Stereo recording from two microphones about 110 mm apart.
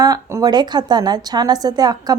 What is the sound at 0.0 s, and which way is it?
Speech, 30° right (ahead or behind).